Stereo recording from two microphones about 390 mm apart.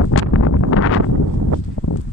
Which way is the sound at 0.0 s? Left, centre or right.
Left.